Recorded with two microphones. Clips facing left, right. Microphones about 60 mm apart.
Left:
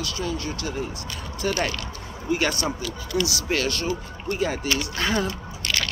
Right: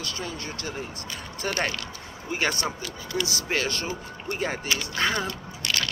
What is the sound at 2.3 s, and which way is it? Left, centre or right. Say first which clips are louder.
Speech: left 3 dB; right.